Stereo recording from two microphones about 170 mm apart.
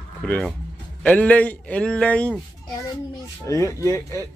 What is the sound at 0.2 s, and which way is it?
A man's voice, 5° left (ahead or behind).